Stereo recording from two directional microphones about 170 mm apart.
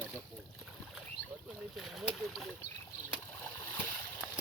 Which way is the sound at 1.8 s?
Centre (ahead or behind).